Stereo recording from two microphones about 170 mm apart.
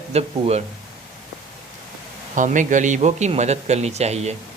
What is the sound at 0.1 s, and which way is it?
Speech, 40° right (ahead or behind).